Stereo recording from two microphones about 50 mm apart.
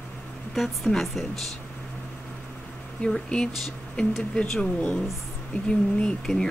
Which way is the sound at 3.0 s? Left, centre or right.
Centre.